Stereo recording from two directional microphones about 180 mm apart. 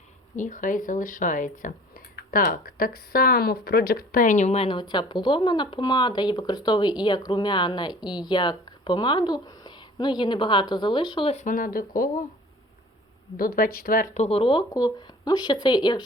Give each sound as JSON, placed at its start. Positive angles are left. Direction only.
{"t": 0.3, "sound": "speech", "side_deg": 45}
{"t": 11.3, "sound": "speech", "side_deg": 50}
{"t": 13.3, "sound": "speech", "side_deg": 55}